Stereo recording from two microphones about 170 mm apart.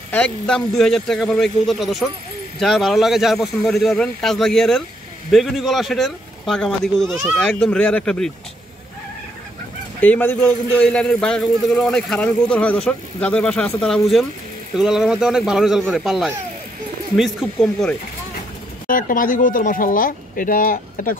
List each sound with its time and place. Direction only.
0.1 s a man's voice: 5° left (ahead or behind)
9.9 s a man's voice: 10° left (ahead or behind)
18.9 s speech: 55° left (ahead or behind)